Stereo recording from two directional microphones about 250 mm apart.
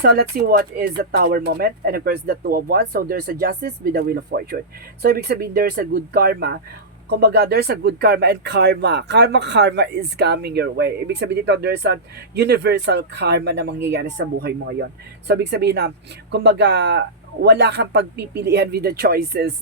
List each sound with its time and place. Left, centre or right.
0.0 s speech: right